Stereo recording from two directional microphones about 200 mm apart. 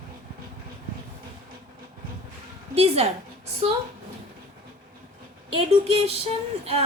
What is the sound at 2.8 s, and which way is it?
Speech, 30° right (ahead or behind).